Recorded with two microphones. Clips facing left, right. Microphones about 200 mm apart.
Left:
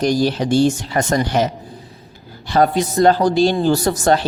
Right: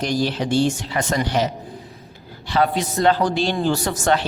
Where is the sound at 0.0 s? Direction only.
40° left (ahead or behind).